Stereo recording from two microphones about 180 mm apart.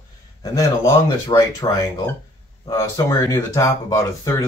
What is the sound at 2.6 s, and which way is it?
Speech, 15° left (ahead or behind).